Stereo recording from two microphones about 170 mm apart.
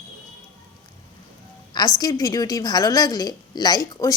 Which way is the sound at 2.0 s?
20° left (ahead or behind).